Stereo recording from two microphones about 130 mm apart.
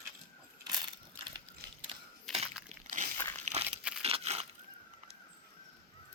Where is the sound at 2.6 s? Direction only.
70° right (ahead or behind).